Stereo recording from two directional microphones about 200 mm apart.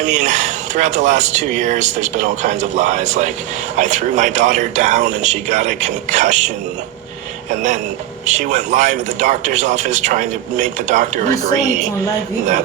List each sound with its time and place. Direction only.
0.0 s speech: 40° right (ahead or behind)
8.3 s speech: 40° right (ahead or behind)